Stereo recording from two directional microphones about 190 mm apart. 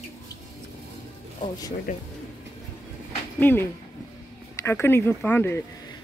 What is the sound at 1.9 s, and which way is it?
Speech, 45° left (ahead or behind).